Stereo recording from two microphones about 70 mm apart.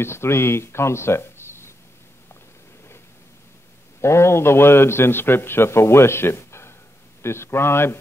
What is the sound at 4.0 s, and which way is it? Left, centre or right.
Speech, left.